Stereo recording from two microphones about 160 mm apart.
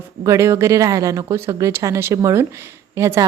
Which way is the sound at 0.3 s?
20° right (ahead or behind).